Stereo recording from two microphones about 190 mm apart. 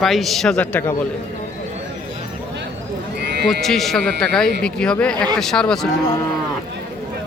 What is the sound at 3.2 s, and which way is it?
Sheep, 60° right (ahead or behind).